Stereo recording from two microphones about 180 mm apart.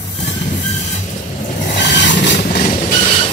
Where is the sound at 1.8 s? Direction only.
75° left (ahead or behind).